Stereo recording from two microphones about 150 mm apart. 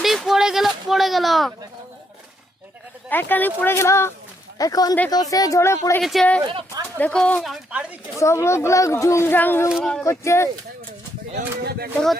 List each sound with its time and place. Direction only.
0.0 s a sound: centre (ahead or behind)
3.1 s speech: 10° left (ahead or behind)
6.0 s speech: centre (ahead or behind)
6.4 s speech: 35° right (ahead or behind)
7.0 s speech: 5° left (ahead or behind)
7.4 s speech: 5° right (ahead or behind)
8.2 s speech: 20° left (ahead or behind)
9.6 s speech: centre (ahead or behind)
10.0 s speech: 20° left (ahead or behind)
11.6 s speech: 90° right